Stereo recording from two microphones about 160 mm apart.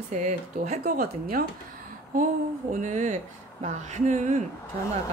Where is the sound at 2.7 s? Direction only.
50° right (ahead or behind).